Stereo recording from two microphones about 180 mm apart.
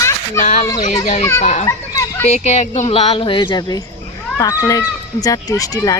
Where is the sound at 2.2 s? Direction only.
40° left (ahead or behind).